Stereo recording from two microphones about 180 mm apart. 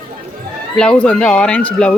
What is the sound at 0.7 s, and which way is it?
Speech, 5° left (ahead or behind).